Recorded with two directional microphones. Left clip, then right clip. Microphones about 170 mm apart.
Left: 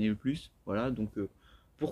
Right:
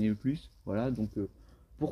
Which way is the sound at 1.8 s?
30° right (ahead or behind).